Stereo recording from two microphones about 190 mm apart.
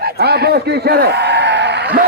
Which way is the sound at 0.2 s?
60° right (ahead or behind).